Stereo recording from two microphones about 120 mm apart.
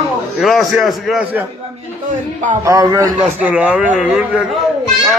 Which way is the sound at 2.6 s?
30° right (ahead or behind).